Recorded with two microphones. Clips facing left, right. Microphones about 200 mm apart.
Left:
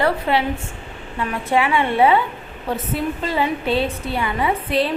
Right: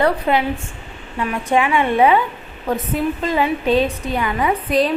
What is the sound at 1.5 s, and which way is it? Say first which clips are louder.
A woman's voice: right 2 dB; 15° right (ahead or behind).